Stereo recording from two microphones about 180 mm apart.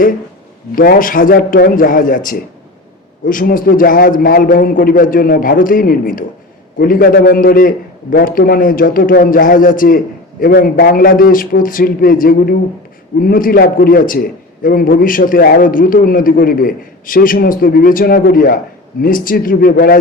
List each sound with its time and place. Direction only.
0.8 s a man's voice: 50° left (ahead or behind)